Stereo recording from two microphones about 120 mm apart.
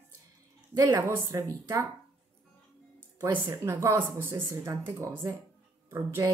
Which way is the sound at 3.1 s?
20° right (ahead or behind).